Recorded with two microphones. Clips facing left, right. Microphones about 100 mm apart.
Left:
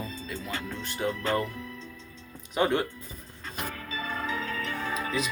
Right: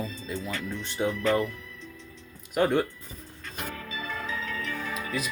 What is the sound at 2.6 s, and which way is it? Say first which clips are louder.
Speech: right 2 dB; 10° left (ahead or behind).